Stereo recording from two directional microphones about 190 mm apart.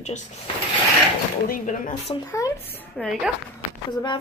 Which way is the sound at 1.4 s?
45° left (ahead or behind).